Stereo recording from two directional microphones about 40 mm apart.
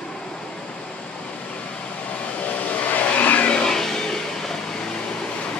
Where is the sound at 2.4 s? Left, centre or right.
Left.